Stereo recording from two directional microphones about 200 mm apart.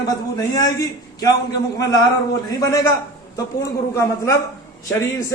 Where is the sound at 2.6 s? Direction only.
15° left (ahead or behind).